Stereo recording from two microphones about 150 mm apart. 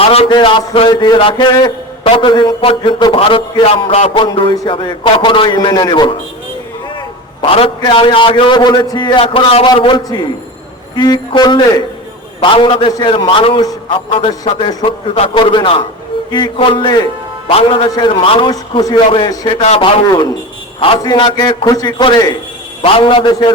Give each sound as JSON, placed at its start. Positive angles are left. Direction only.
{"t": 0.0, "sound": "a man's voice", "side_deg": 40}
{"t": 7.4, "sound": "a man's voice", "side_deg": 35}
{"t": 19.6, "sound": "a man's voice", "side_deg": 45}
{"t": 20.1, "sound": "a man's voice", "side_deg": 25}
{"t": 20.7, "sound": "a man's voice", "side_deg": 35}